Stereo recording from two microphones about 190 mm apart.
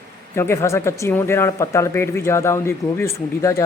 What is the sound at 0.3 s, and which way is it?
Speech, 15° left (ahead or behind).